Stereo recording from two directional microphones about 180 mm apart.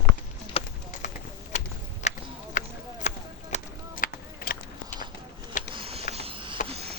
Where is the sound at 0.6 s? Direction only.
30° left (ahead or behind).